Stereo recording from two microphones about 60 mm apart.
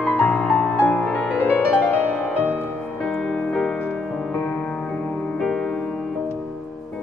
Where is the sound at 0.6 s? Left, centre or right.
Left.